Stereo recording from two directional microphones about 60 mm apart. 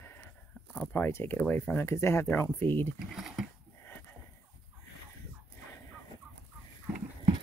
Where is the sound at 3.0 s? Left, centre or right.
Centre.